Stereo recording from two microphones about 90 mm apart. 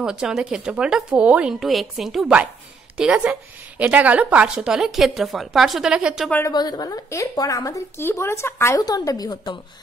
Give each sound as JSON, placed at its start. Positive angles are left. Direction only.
{"t": 0.0, "sound": "a woman's voice", "side_deg": -10}
{"t": 6.5, "sound": "a woman's voice", "side_deg": 50}
{"t": 7.1, "sound": "a woman's voice", "side_deg": 40}
{"t": 8.8, "sound": "a woman's voice", "side_deg": 45}